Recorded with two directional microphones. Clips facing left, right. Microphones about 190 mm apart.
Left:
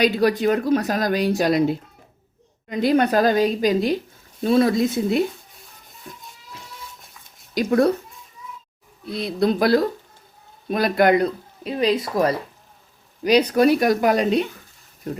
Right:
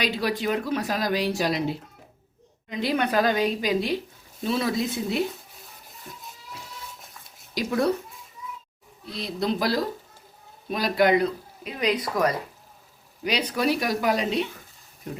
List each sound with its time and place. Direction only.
0.0 s speech: 45° left (ahead or behind)
7.5 s speech: 55° left (ahead or behind)
9.1 s speech: 60° left (ahead or behind)
11.6 s speech: 30° left (ahead or behind)
13.2 s speech: 45° left (ahead or behind)